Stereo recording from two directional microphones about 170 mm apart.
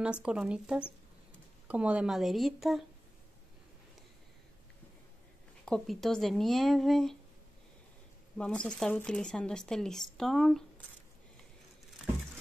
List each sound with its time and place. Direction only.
0.0 s speech: 5° right (ahead or behind)
5.7 s speech: centre (ahead or behind)
8.4 s speech: 5° left (ahead or behind)